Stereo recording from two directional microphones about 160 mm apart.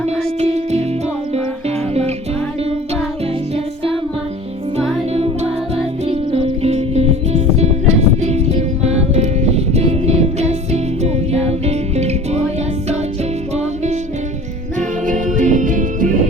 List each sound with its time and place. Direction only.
0.3 s music: 45° right (ahead or behind)
5.1 s music: 40° right (ahead or behind)
13.6 s music: 45° right (ahead or behind)